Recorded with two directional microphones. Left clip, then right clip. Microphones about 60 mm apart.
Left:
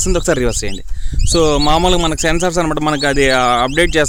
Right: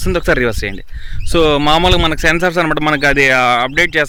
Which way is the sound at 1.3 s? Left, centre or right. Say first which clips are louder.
Right 1 dB; left.